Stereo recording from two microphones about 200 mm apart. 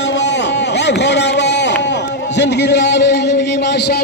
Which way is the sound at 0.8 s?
60° left (ahead or behind).